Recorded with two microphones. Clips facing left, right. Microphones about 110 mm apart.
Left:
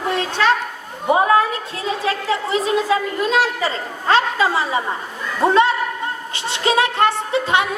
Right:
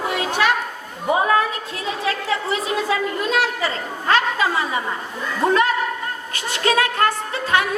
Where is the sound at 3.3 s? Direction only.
30° left (ahead or behind).